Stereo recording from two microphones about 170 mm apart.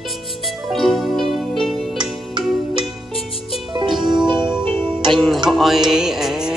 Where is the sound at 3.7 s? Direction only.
30° right (ahead or behind).